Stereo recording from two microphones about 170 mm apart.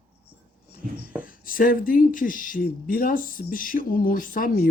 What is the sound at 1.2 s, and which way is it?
Speech, 55° left (ahead or behind).